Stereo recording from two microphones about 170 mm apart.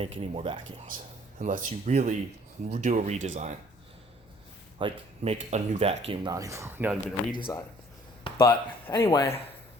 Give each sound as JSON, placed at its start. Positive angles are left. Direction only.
{"t": 0.0, "sound": "speech", "side_deg": -35}
{"t": 0.9, "sound": "speech", "side_deg": -50}
{"t": 4.8, "sound": "speech", "side_deg": -35}
{"t": 6.3, "sound": "speech", "side_deg": -20}
{"t": 7.5, "sound": "speech", "side_deg": 20}